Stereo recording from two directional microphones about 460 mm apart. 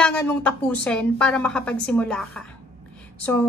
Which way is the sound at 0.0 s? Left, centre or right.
Centre.